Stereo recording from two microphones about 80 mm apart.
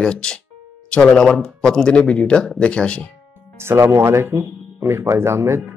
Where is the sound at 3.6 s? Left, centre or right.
Right.